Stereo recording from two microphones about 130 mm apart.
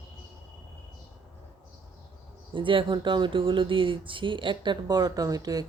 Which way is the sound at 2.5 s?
40° right (ahead or behind).